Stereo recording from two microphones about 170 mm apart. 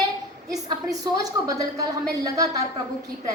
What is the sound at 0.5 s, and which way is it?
A woman's voice, 20° right (ahead or behind).